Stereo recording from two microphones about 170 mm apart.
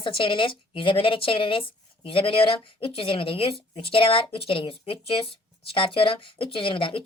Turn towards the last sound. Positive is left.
turn(degrees=30)  # may be behind; listen again after turning